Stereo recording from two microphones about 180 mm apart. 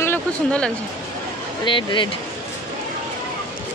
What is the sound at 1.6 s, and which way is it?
Speech, 25° left (ahead or behind).